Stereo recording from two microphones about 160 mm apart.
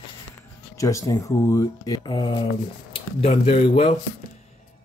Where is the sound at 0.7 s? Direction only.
20° left (ahead or behind).